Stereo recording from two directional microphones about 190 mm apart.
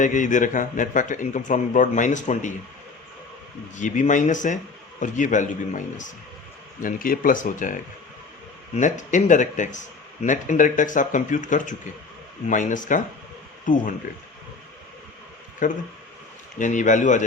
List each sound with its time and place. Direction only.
0.0 s speech: 40° left (ahead or behind)
3.8 s speech: 40° left (ahead or behind)
15.6 s speech: 45° left (ahead or behind)